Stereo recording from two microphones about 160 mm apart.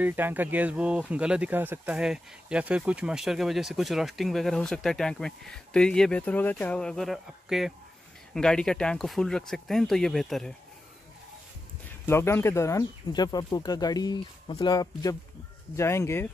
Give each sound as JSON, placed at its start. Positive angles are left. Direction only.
{"t": 0.0, "sound": "speech", "side_deg": -10}
{"t": 12.1, "sound": "speech", "side_deg": 15}